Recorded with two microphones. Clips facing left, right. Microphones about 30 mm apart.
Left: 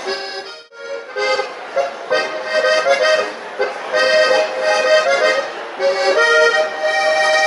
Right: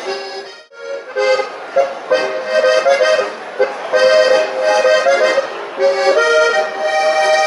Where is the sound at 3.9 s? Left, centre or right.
Left.